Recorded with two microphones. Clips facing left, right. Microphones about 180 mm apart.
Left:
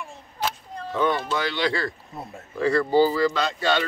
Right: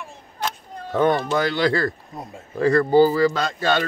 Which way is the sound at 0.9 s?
50° right (ahead or behind).